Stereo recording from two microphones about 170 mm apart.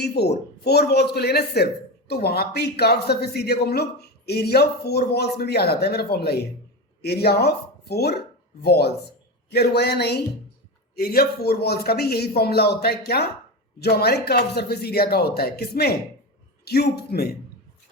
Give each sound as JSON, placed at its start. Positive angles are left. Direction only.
{"t": 0.0, "sound": "speech", "side_deg": 75}
{"t": 10.9, "sound": "speech", "side_deg": 60}